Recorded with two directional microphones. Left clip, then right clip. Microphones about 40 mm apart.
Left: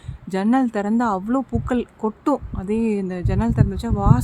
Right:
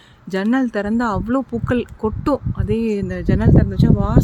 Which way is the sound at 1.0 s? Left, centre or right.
Right.